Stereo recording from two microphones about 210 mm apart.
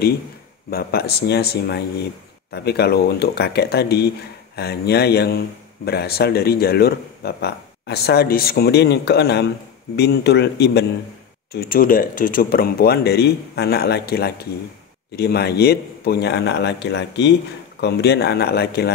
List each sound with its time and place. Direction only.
0.7 s a man's voice: 45° left (ahead or behind)